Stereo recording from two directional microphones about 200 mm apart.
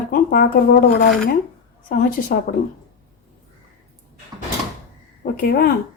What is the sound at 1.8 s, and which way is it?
Speech, 45° left (ahead or behind).